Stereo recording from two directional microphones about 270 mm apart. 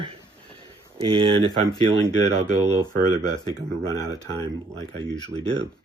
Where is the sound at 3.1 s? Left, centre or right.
Centre.